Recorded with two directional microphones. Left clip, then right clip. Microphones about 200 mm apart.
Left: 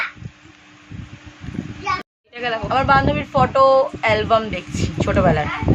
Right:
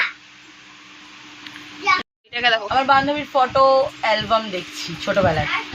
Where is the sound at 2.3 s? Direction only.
5° right (ahead or behind).